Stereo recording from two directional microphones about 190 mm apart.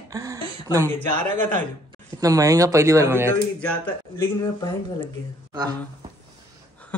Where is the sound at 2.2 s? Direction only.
15° right (ahead or behind).